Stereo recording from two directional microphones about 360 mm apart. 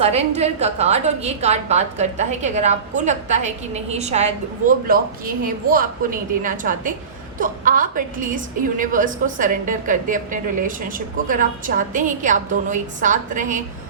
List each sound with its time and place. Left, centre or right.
0.0 s a woman's voice: centre
5.7 s a woman's voice: right